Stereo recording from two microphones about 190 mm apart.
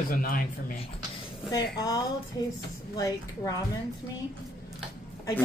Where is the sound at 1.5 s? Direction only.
20° left (ahead or behind).